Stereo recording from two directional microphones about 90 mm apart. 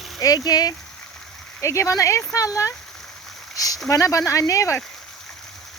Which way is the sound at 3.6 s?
40° left (ahead or behind).